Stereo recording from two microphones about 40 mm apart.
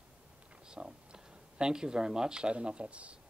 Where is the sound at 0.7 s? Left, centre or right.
Centre.